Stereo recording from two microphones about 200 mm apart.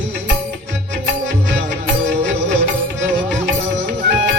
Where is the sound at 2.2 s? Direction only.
60° right (ahead or behind).